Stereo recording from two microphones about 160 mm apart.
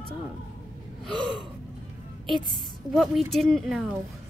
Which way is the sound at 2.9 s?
Centre (ahead or behind).